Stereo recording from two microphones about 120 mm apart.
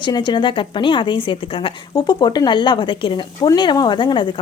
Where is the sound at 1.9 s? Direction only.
35° left (ahead or behind).